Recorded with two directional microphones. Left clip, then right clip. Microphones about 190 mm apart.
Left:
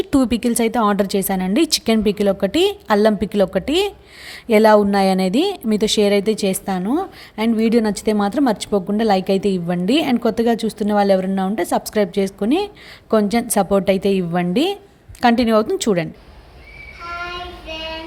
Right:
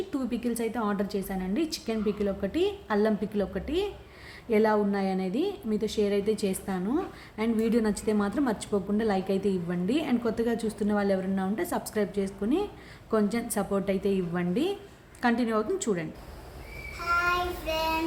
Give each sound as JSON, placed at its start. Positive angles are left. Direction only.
{"t": 0.1, "sound": "a woman's voice", "side_deg": 55}